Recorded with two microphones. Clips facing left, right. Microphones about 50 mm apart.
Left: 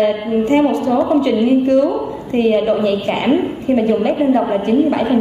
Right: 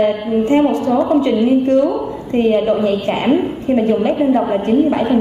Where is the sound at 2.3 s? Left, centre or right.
Left.